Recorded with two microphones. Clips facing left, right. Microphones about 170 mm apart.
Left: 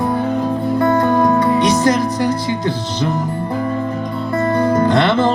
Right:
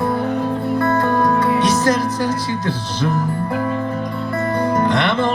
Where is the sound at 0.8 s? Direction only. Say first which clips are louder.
Left 4 dB; 15° left (ahead or behind).